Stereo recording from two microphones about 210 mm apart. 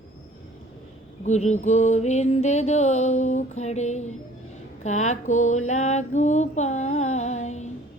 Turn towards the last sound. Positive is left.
turn(degrees=35)  # may be behind; listen again after turning